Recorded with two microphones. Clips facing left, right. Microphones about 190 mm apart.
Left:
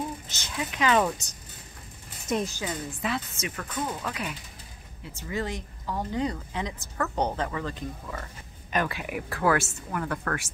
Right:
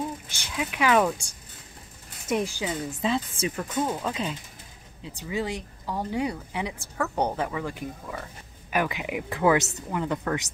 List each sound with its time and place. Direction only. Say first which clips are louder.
0.3 s speech: right 2 dB; 15° right (ahead or behind)
2.2 s speech: right 2 dB; 10° right (ahead or behind)
3.0 s speech: right 6 dB; 30° right (ahead or behind)